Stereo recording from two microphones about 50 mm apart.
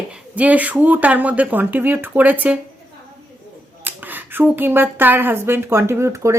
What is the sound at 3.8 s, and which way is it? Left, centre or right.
Speech, right.